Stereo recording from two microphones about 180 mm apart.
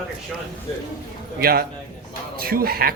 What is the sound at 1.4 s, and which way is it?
Speech, 55° right (ahead or behind).